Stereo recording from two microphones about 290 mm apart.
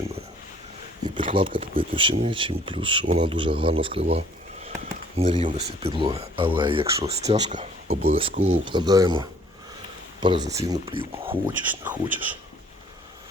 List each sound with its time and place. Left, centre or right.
1.1 s speech: centre
11.7 s speech: centre